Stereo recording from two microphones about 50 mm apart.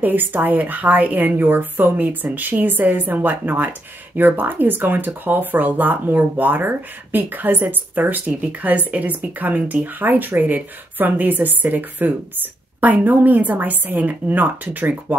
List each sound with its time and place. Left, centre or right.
0.0 s speech: right